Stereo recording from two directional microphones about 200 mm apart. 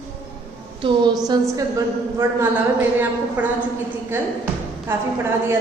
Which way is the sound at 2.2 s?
10° right (ahead or behind).